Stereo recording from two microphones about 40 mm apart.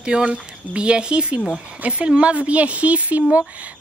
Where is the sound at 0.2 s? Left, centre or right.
Right.